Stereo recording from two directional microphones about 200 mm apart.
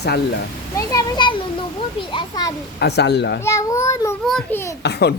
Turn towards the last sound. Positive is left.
turn(degrees=55)  # may be behind; listen again after turning